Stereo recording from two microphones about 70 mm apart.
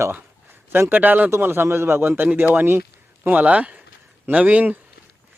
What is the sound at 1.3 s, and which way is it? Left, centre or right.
Speech, right.